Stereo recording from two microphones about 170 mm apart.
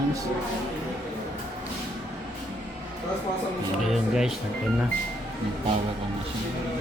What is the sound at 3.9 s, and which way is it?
Speech, 5° right (ahead or behind).